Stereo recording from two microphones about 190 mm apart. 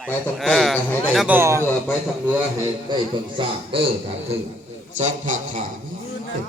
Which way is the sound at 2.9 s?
25° right (ahead or behind).